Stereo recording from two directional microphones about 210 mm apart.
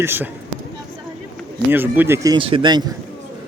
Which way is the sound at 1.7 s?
10° right (ahead or behind).